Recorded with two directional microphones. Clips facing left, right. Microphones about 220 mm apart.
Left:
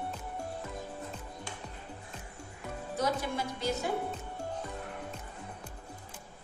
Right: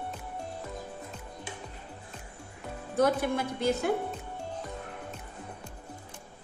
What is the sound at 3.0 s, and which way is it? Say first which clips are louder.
Speech: right 7 dB; 55° right (ahead or behind).